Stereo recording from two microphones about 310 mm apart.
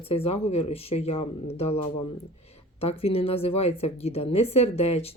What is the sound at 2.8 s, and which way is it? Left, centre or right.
Speech, centre.